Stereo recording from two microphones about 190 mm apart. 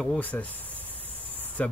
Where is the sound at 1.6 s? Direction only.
5° left (ahead or behind).